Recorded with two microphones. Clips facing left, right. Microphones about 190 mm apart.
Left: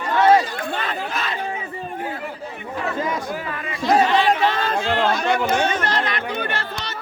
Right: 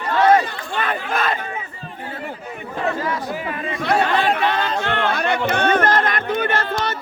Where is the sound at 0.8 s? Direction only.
55° right (ahead or behind).